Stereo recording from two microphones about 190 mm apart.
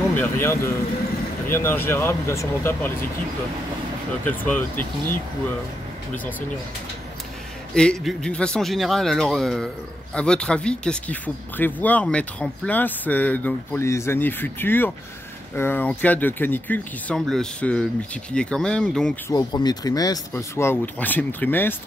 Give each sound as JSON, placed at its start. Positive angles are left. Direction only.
{"t": 0.1, "sound": "speech", "side_deg": 10}
{"t": 4.3, "sound": "speech", "side_deg": 10}
{"t": 7.7, "sound": "a man's voice", "side_deg": 5}
{"t": 19.3, "sound": "speech", "side_deg": 20}